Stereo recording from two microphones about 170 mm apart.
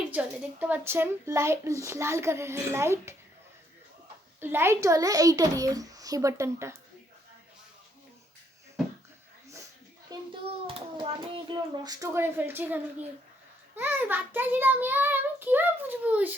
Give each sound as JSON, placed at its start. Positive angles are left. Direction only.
{"t": 0.1, "sound": "a child's voice", "side_deg": -10}
{"t": 4.4, "sound": "a child's voice", "side_deg": -15}
{"t": 10.1, "sound": "a sound", "side_deg": -25}
{"t": 10.7, "sound": "a child's voice", "side_deg": -30}